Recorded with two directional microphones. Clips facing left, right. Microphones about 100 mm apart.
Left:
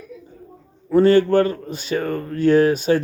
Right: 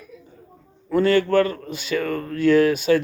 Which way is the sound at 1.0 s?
35° left (ahead or behind).